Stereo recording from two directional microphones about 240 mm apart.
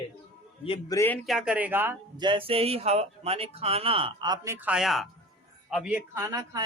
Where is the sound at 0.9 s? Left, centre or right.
Centre.